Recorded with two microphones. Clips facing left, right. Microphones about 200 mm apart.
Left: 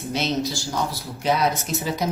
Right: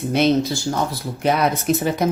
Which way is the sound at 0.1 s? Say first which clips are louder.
Right 7 dB; 55° right (ahead or behind).